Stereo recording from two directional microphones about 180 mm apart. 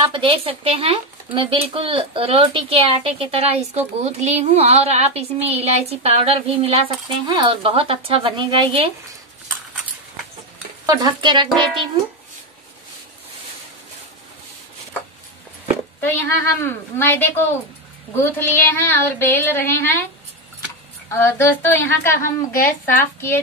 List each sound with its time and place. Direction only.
0.1 s speech: 30° right (ahead or behind)
10.9 s speech: 25° right (ahead or behind)
16.0 s speech: 10° left (ahead or behind)
21.2 s speech: 15° left (ahead or behind)